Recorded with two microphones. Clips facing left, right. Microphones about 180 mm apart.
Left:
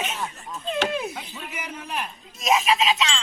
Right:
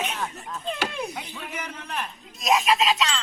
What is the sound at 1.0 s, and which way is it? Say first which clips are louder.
Speech: even; 5° left (ahead or behind).